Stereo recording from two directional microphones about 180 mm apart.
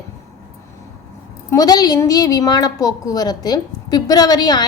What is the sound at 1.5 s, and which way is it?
A woman's voice, 20° left (ahead or behind).